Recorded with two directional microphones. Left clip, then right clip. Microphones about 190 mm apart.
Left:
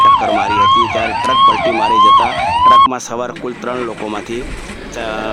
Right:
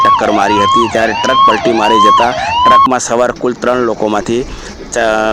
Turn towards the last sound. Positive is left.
turn(degrees=-30)  # may be behind; listen again after turning